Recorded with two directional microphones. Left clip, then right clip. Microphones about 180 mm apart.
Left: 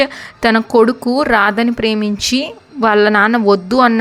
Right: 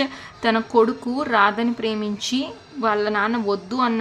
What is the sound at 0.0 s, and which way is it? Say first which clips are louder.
A woman's voice: left 8 dB; 40° left (ahead or behind).